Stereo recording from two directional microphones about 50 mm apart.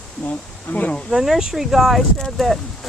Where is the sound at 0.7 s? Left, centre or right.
Left.